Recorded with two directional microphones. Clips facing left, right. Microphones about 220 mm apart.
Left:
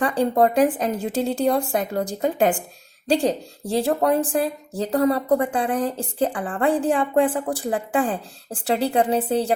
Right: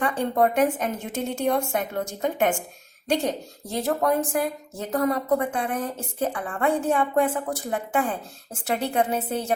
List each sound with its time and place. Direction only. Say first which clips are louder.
0.0 s speech: left 3 dB; 35° left (ahead or behind)